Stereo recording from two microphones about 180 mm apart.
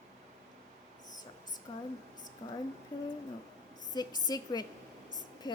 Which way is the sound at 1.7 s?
25° left (ahead or behind).